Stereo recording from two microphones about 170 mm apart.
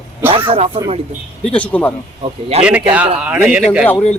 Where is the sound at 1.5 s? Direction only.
10° left (ahead or behind).